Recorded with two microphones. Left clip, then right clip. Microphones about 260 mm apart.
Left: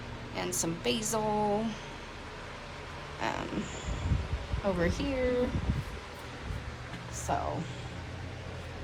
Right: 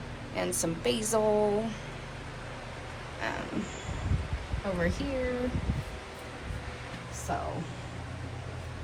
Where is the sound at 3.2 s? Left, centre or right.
Centre.